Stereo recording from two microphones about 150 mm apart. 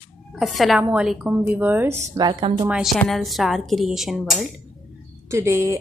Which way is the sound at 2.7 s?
Centre (ahead or behind).